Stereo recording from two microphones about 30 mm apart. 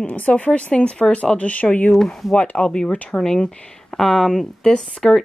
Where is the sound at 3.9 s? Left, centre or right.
Centre.